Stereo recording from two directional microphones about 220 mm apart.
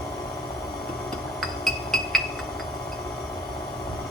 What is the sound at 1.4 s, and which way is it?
Chink, centre (ahead or behind).